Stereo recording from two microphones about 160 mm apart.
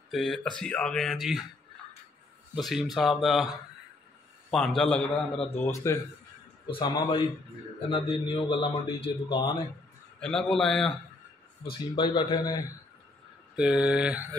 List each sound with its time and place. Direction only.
0.1 s speech: centre (ahead or behind)
2.5 s a man's voice: centre (ahead or behind); by 5.9 s 15° left (ahead or behind)
6.7 s a man's voice: 30° left (ahead or behind)
10.2 s speech: 5° left (ahead or behind)
11.9 s a man's voice: 30° left (ahead or behind)
13.6 s speech: 5° right (ahead or behind)